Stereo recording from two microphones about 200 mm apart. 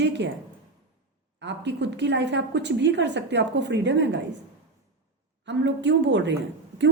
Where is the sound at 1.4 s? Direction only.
60° right (ahead or behind).